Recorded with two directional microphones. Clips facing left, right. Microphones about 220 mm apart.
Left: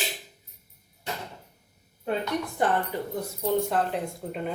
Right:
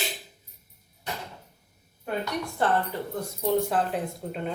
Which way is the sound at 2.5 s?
15° left (ahead or behind).